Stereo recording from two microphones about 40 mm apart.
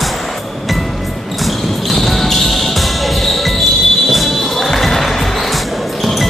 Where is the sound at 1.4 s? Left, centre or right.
Centre.